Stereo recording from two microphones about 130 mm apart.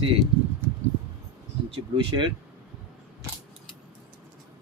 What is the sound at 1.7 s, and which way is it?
Speech, 35° right (ahead or behind).